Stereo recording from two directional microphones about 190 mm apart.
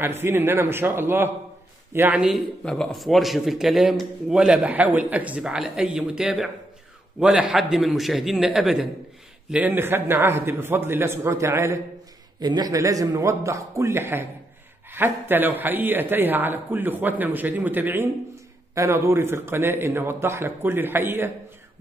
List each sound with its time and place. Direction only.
0.0 s a man's voice: 10° right (ahead or behind)